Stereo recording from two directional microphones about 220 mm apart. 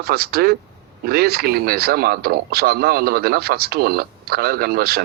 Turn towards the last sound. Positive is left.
turn(degrees=-45)  # may be behind; listen again after turning